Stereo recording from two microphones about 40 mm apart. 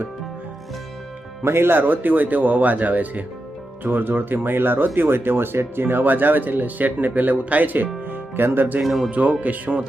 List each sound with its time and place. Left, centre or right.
1.5 s speech: right
1.8 s speech: right
3.8 s speech: right
8.1 s music: right
8.8 s speech: centre
9.0 s speech: right